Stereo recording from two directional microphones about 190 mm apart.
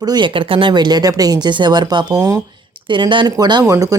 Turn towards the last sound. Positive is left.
turn(degrees=-20)  # may be behind; listen again after turning